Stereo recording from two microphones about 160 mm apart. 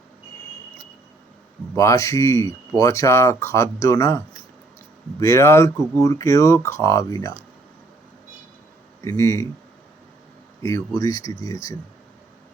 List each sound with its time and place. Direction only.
1.7 s speech: 20° left (ahead or behind)
5.2 s speech: 20° left (ahead or behind)
9.0 s speech: 20° left (ahead or behind)
10.6 s speech: 20° left (ahead or behind)